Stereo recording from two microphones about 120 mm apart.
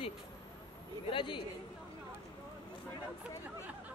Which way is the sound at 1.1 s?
45° left (ahead or behind).